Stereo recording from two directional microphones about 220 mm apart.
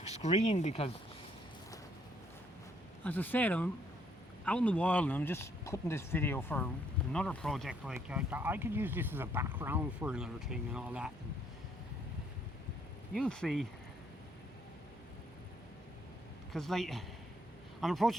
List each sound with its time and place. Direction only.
0.2 s speech: 30° left (ahead or behind)
3.0 s speech: 10° left (ahead or behind)
13.1 s speech: 5° left (ahead or behind)
16.5 s speech: centre (ahead or behind)